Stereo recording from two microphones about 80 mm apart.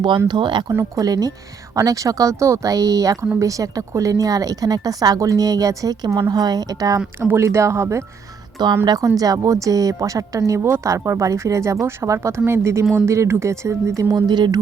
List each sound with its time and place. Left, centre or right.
0.3 s speech: right
0.9 s speech: right
7.2 s speech: right
8.5 s speech: right
9.0 s speech: right